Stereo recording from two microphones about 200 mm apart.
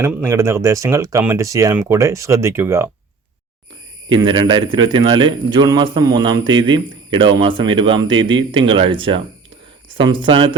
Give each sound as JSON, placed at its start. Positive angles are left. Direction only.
{"t": 0.0, "sound": "speech", "side_deg": -10}
{"t": 4.1, "sound": "a man's voice", "side_deg": -20}